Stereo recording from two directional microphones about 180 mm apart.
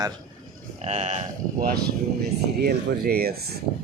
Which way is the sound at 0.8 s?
40° right (ahead or behind).